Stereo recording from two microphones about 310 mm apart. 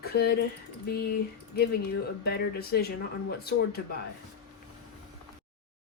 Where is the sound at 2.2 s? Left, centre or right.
Left.